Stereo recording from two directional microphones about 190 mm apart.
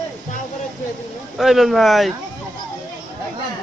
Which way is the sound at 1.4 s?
Centre (ahead or behind).